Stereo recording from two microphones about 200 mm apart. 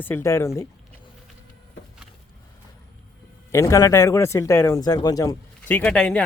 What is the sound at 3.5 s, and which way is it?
Speech, 15° left (ahead or behind).